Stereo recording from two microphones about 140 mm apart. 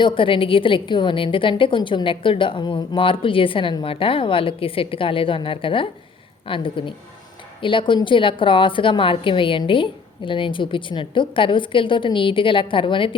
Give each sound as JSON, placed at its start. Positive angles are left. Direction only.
{"t": 0.0, "sound": "a woman's voice", "side_deg": 40}